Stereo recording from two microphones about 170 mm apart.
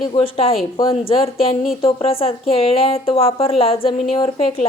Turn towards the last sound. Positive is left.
turn(degrees=35)  # may be behind; listen again after turning